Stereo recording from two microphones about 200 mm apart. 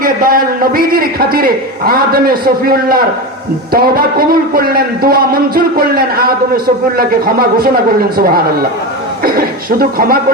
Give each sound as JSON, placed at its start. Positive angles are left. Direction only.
{"t": 0.0, "sound": "a man's voice", "side_deg": -45}
{"t": 9.2, "sound": "a man's voice", "side_deg": -50}